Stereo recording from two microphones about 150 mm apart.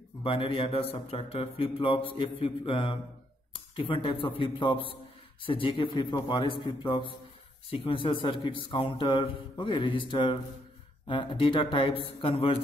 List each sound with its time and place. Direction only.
0.2 s speech: 35° left (ahead or behind)